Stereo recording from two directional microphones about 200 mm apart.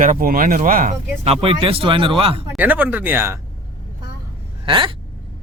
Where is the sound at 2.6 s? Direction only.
10° right (ahead or behind).